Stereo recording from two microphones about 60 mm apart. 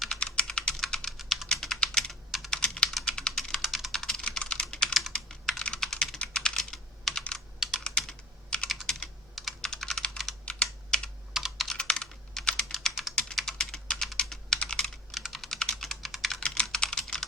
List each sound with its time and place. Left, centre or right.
0.1 s typing: centre
3.6 s typing: centre
4.0 s computer keyboard: centre
8.9 s computer keyboard: centre
10.4 s computer keyboard: centre
11.3 s computer keyboard: centre
11.8 s computer keyboard: centre
13.3 s typing: centre
13.9 s computer keyboard: centre
15.1 s typing: centre